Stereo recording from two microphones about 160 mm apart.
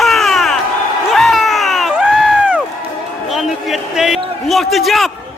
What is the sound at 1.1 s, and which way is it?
Crowd, centre (ahead or behind).